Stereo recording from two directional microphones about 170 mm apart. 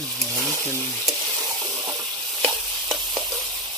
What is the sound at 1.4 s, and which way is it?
Sizzle, 20° right (ahead or behind).